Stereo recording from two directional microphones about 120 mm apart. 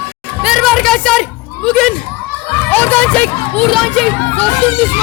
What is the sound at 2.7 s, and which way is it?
Speech, 10° left (ahead or behind).